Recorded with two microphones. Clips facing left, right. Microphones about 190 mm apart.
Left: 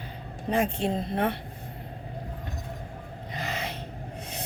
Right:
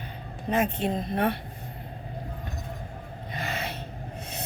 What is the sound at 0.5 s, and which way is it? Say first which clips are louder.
Speech: even; 30° left (ahead or behind).